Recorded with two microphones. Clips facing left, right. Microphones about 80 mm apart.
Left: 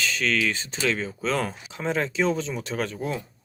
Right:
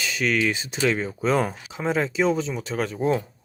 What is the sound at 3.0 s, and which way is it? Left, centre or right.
Speech, right.